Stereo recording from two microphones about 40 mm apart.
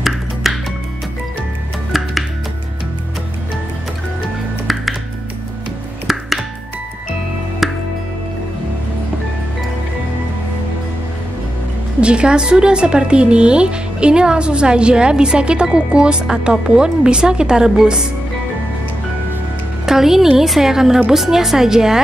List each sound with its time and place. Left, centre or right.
0.5 s music: centre
1.9 s music: centre
7.6 s music: centre
12.0 s a woman's voice: right
19.9 s a woman's voice: centre